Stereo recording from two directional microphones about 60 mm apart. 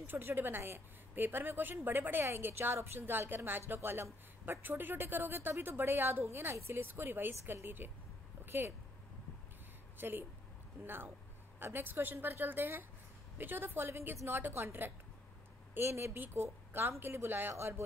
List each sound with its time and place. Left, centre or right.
0.0 s speech: right
9.9 s speech: right
11.6 s a woman's voice: right
17.0 s speech: right